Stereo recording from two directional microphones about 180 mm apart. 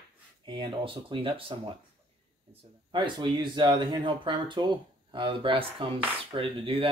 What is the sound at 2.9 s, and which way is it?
Speech, 25° right (ahead or behind).